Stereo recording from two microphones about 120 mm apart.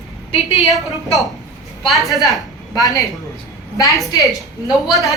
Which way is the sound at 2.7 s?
30° left (ahead or behind).